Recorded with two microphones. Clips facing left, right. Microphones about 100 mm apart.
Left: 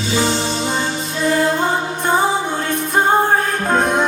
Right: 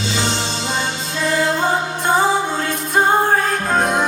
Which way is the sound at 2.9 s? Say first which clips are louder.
Even; 20° left (ahead or behind).